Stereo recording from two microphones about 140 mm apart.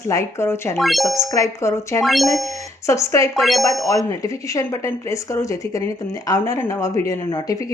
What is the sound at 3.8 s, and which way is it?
Speech, 25° left (ahead or behind).